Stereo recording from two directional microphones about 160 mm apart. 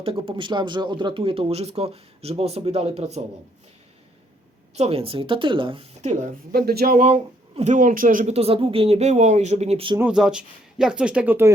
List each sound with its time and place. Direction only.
0.0 s speech: 35° right (ahead or behind)
4.7 s speech: 40° right (ahead or behind); by 7.1 s 65° right (ahead or behind)
7.1 s speech: 45° right (ahead or behind)
10.0 s speech: 5° right (ahead or behind)